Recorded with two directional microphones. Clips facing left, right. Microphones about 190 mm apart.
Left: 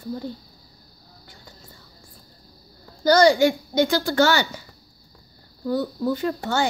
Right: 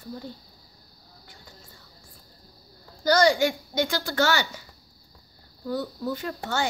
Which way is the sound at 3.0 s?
30° left (ahead or behind).